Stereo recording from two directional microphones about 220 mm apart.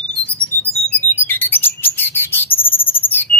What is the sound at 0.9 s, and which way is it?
Bird, 10° left (ahead or behind).